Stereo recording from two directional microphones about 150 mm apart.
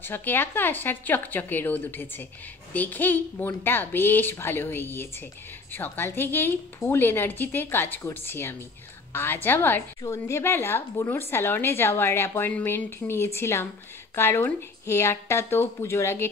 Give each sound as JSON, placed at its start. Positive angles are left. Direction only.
{"t": 0.0, "sound": "a woman's voice", "side_deg": 15}